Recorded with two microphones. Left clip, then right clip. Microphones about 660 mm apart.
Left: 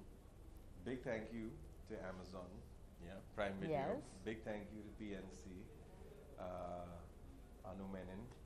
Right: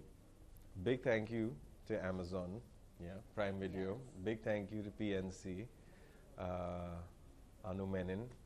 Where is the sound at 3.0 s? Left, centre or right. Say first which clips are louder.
Right 3 dB; right.